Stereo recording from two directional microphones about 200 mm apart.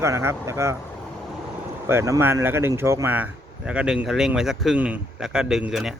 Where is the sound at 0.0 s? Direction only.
15° right (ahead or behind).